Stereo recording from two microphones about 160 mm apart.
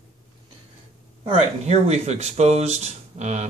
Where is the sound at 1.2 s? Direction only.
45° right (ahead or behind).